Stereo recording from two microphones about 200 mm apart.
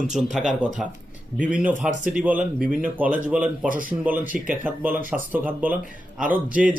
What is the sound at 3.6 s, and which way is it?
Speech, 45° right (ahead or behind).